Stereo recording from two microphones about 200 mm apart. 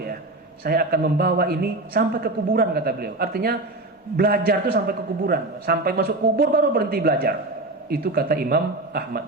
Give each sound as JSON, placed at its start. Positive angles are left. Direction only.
{"t": 0.6, "sound": "a man's voice", "side_deg": -50}